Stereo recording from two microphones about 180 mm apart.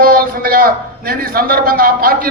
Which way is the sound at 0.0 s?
55° right (ahead or behind).